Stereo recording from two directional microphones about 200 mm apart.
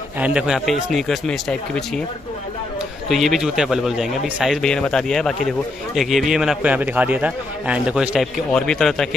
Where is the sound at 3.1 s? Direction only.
Centre (ahead or behind).